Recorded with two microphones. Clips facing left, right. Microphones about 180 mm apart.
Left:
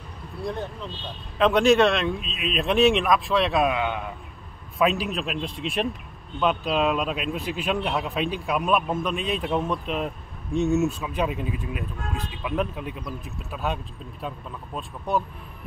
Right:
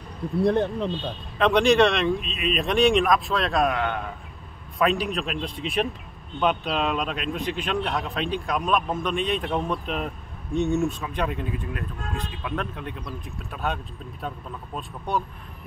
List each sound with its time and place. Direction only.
0.5 s speech: 65° right (ahead or behind)
1.4 s speech: centre (ahead or behind)
14.8 s speech: centre (ahead or behind)